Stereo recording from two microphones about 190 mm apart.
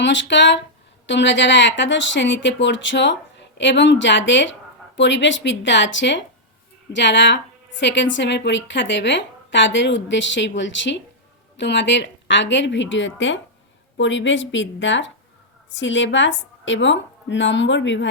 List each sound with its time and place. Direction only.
0.0 s a woman's voice: 70° left (ahead or behind)